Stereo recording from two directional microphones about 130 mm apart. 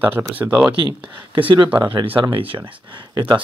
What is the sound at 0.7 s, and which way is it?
Speech, 40° right (ahead or behind).